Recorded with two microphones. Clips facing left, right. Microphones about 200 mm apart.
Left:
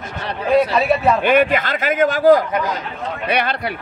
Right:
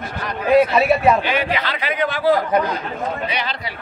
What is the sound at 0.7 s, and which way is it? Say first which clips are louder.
Speech: right 1 dB; 10° right (ahead or behind).